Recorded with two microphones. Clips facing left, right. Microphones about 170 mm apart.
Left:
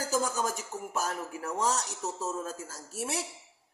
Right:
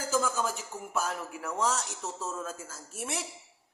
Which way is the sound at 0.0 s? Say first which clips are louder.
Even; 40° left (ahead or behind).